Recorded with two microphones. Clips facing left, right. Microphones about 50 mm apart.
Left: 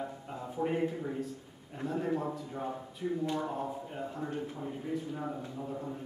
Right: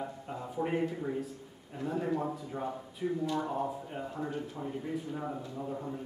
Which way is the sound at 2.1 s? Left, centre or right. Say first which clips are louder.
Right 1 dB; centre.